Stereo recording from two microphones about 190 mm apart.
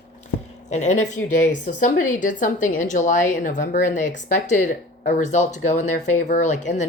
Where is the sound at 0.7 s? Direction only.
40° left (ahead or behind).